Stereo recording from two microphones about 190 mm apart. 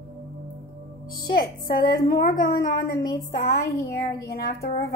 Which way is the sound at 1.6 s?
50° left (ahead or behind).